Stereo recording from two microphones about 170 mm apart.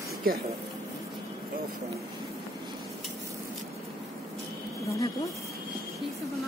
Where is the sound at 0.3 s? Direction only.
60° right (ahead or behind).